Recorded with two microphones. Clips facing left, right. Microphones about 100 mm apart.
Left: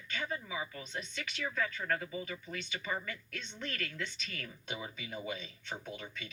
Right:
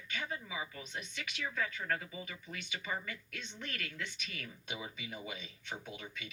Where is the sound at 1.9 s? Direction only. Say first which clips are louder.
Left 2 dB; 40° left (ahead or behind).